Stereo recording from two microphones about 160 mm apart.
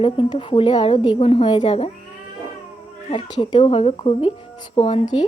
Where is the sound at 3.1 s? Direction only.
30° left (ahead or behind).